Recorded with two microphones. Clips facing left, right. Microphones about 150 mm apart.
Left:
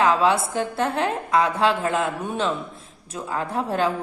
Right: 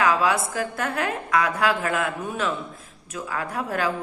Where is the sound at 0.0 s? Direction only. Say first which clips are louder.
Left 2 dB; 30° left (ahead or behind).